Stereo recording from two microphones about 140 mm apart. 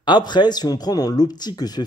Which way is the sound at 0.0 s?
30° left (ahead or behind).